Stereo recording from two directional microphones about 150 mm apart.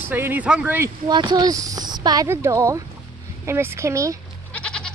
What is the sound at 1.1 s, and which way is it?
Speech, 30° right (ahead or behind).